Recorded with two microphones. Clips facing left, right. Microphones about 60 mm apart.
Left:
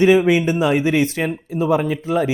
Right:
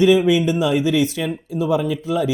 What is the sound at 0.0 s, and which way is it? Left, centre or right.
Speech, left.